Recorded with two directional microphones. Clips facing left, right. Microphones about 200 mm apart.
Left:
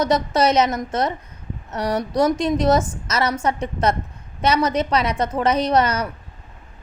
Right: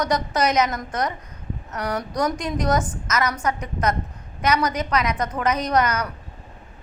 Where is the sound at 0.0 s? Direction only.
25° left (ahead or behind).